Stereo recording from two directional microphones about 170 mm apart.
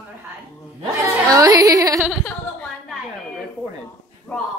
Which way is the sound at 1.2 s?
20° right (ahead or behind).